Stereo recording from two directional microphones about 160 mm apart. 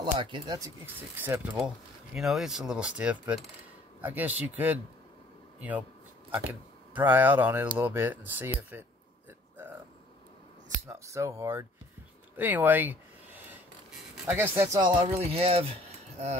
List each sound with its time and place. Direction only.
0.0 s speech: 30° right (ahead or behind)
0.8 s speech: 10° right (ahead or behind)
2.1 s coin: centre (ahead or behind)
4.0 s speech: 10° right (ahead or behind)
10.9 s speech: 20° right (ahead or behind)
12.4 s a sound: 10° right (ahead or behind)
14.2 s speech: 15° right (ahead or behind)
15.1 s speech: 40° right (ahead or behind)